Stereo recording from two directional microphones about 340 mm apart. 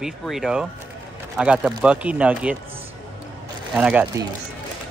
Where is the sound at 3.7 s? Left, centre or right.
Centre.